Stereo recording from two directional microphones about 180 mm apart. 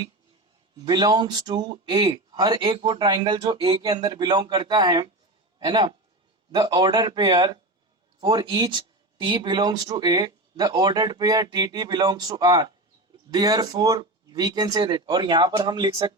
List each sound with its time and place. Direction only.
0.9 s a man's voice: 25° right (ahead or behind)